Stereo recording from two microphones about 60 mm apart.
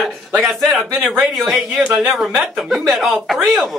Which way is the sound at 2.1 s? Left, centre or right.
Centre.